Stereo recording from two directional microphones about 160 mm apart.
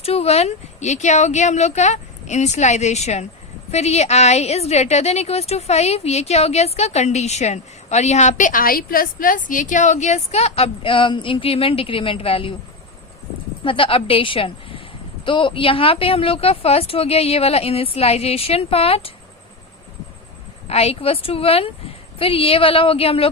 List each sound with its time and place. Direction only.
0.0 s a woman's voice: 40° left (ahead or behind)
13.7 s speech: 35° left (ahead or behind)
20.7 s speech: 40° left (ahead or behind)